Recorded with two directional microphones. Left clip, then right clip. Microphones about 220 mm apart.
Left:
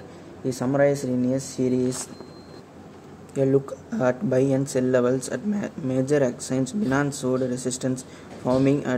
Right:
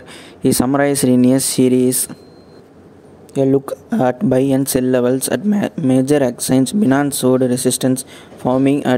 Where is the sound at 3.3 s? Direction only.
30° right (ahead or behind).